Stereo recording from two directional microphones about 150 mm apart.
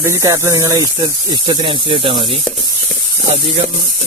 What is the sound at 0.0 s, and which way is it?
Speech, 20° right (ahead or behind).